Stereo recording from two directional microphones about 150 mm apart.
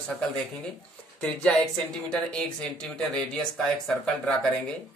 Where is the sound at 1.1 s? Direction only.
5° left (ahead or behind).